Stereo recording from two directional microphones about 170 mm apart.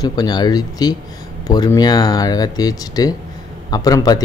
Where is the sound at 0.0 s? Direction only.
25° left (ahead or behind).